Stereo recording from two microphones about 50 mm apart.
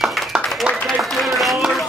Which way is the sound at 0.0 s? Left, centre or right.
Centre.